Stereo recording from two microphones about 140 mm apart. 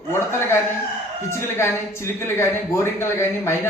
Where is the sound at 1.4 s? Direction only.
20° left (ahead or behind).